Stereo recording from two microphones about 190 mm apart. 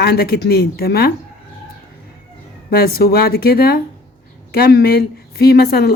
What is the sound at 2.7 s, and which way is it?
A woman's voice, 55° left (ahead or behind).